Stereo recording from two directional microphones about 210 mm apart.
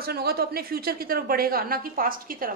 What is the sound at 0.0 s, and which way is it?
A woman's voice, 50° right (ahead or behind).